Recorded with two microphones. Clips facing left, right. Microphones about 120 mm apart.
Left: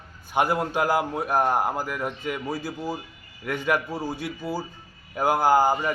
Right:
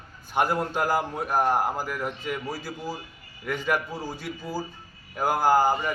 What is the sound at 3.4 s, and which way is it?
Speech, centre (ahead or behind).